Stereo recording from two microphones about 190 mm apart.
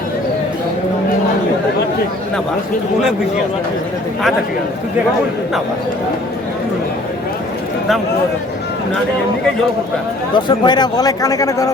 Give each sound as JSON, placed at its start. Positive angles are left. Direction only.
{"t": 10.3, "sound": "speech", "side_deg": 20}